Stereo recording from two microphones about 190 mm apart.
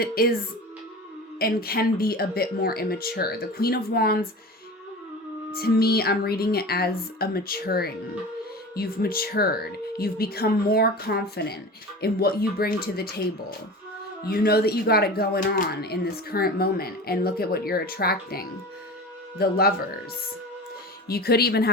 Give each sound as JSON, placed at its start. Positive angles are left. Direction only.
{"t": 0.0, "sound": "speech", "side_deg": 50}
{"t": 1.4, "sound": "speech", "side_deg": 55}
{"t": 5.5, "sound": "speech", "side_deg": 50}
{"t": 14.3, "sound": "speech", "side_deg": 55}
{"t": 21.1, "sound": "speech", "side_deg": 55}